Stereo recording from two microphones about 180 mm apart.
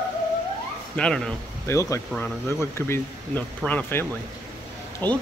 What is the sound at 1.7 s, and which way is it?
Speech, 15° left (ahead or behind).